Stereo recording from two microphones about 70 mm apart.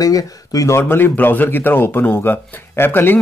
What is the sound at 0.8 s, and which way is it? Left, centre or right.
Speech, left.